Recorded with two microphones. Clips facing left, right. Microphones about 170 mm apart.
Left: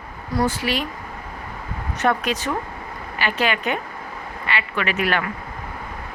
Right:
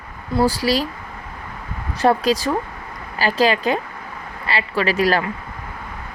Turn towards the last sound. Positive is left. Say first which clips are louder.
# right 4 dB
turn(degrees=-35)  # may be behind; listen again after turning